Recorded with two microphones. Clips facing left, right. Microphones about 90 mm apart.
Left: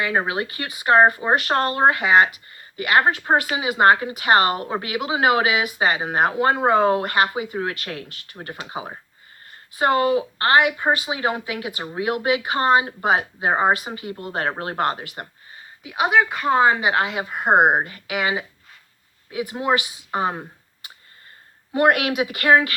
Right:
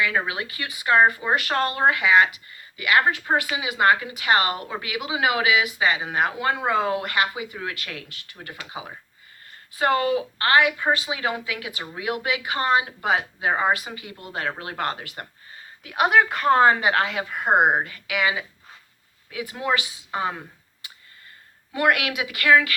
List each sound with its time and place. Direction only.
0.0 s speech: 35° left (ahead or behind)
2.5 s a sound: 35° left (ahead or behind)
3.1 s a woman's voice: 30° left (ahead or behind)
15.8 s a woman's voice: 5° left (ahead or behind)
16.9 s a woman's voice: 20° left (ahead or behind)
21.7 s speech: 30° left (ahead or behind)